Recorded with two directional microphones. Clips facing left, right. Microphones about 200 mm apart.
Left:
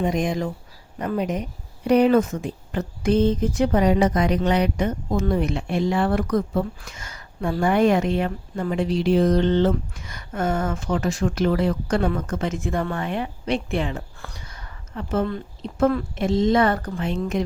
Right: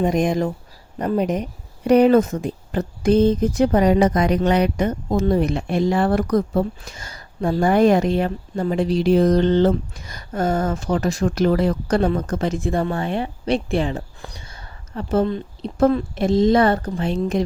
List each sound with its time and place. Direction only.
0.0 s speech: 45° right (ahead or behind)
14.3 s a sound: 25° right (ahead or behind)
15.6 s speech: 35° right (ahead or behind)